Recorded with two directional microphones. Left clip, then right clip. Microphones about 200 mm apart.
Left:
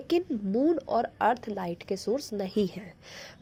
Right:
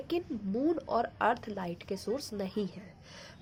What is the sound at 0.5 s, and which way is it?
Speech, 15° left (ahead or behind).